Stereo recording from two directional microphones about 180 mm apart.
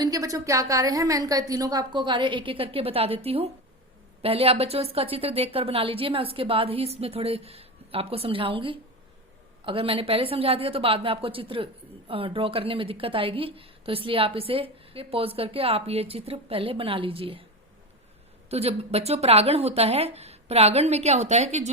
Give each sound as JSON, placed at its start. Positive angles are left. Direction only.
{"t": 0.0, "sound": "a woman's voice", "side_deg": -20}
{"t": 18.5, "sound": "a woman's voice", "side_deg": -35}